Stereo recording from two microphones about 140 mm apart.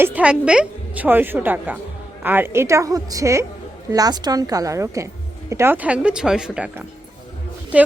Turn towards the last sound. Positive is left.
turn(degrees=-10)  # may be behind; listen again after turning